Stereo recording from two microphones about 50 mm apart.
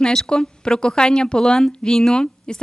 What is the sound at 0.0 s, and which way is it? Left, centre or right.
Speech, centre.